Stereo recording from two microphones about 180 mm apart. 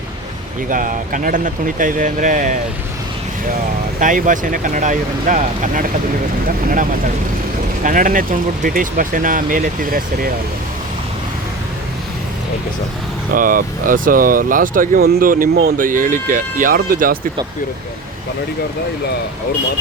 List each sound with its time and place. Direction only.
0.7 s speech: 50° right (ahead or behind)
4.0 s speech: 45° right (ahead or behind)
7.9 s speech: 50° right (ahead or behind)
13.3 s speech: 50° right (ahead or behind)